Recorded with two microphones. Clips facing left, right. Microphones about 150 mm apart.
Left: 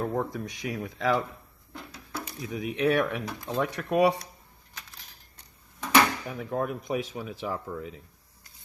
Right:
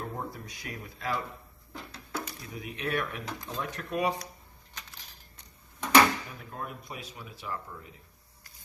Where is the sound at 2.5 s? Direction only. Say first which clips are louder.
Left 9 dB; 90° left; by 4.1 s 70° left (ahead or behind).